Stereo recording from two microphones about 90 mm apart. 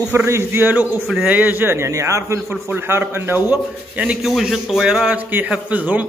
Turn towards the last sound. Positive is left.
turn(degrees=-15)  # may be behind; listen again after turning